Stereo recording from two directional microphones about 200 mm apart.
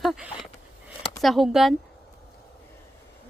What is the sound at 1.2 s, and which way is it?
Speech, centre (ahead or behind).